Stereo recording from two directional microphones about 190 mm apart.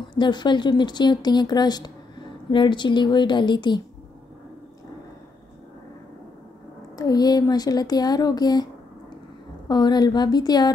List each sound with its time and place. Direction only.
0.1 s speech: 25° left (ahead or behind)
7.0 s speech: 20° left (ahead or behind)
9.7 s speech: 20° left (ahead or behind)